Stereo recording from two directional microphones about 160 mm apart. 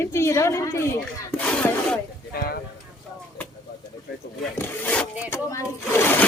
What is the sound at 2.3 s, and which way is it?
Speech, 70° left (ahead or behind).